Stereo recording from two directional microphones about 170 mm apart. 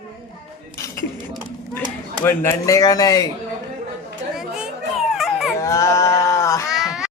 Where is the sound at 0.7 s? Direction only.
15° left (ahead or behind).